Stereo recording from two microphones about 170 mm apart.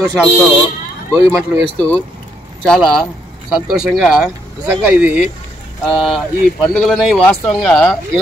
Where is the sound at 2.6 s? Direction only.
5° left (ahead or behind).